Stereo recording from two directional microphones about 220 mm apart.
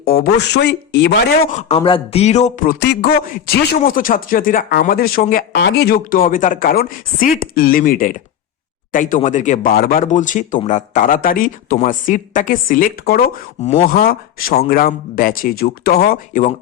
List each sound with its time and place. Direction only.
0.0 s speech: 45° left (ahead or behind)
1.5 s speech: 30° left (ahead or behind)
2.8 s speech: 45° left (ahead or behind)